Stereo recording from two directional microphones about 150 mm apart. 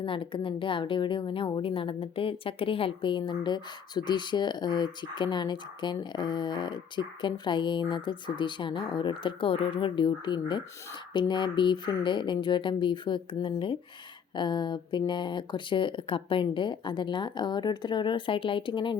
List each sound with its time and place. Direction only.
0.0 s a woman's voice: 35° left (ahead or behind)